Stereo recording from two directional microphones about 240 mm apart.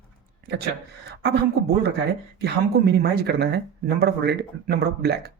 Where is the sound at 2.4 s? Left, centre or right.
Right.